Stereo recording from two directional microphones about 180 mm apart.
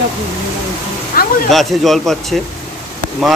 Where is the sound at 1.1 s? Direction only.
55° left (ahead or behind).